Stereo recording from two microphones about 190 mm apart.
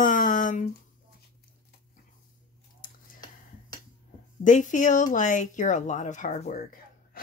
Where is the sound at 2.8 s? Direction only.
45° left (ahead or behind).